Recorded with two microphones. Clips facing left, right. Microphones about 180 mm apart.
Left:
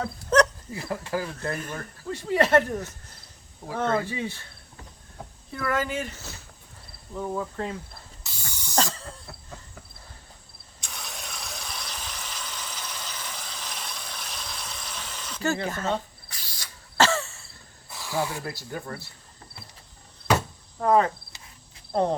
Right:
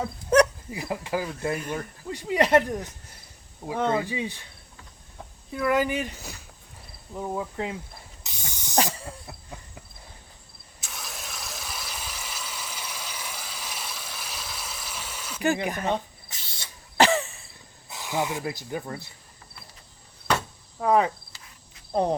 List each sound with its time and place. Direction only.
0.0 s speech: 15° right (ahead or behind)
5.5 s speech: 15° right (ahead or behind)
8.2 s ratchet: 20° right (ahead or behind)
10.8 s a sound: centre (ahead or behind)
20.7 s speech: 10° right (ahead or behind)